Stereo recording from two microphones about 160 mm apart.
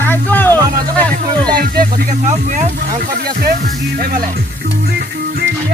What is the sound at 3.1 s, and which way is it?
Speech, 75° right (ahead or behind).